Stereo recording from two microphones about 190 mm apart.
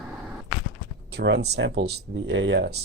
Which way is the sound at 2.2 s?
75° right (ahead or behind).